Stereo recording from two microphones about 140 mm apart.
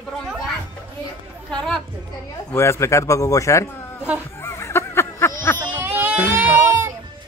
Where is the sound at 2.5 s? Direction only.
20° left (ahead or behind).